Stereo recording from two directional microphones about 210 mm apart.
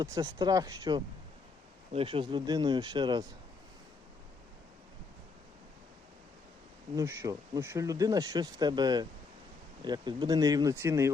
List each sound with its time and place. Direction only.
0.0 s speech: 20° right (ahead or behind)
6.9 s speech: 15° right (ahead or behind)